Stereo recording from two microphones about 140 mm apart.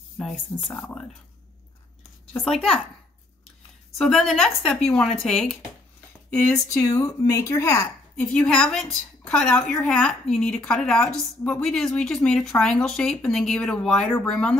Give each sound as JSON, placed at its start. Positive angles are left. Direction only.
{"t": 0.2, "sound": "speech", "side_deg": 0}
{"t": 0.7, "sound": "speech", "side_deg": 15}
{"t": 2.3, "sound": "a woman's voice", "side_deg": 5}
{"t": 4.0, "sound": "a woman's voice", "side_deg": 5}
{"t": 6.3, "sound": "speech", "side_deg": 25}
{"t": 8.3, "sound": "a woman's voice", "side_deg": 5}